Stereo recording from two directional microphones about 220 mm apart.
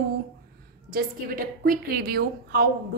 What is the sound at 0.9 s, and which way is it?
A woman's voice, 40° right (ahead or behind).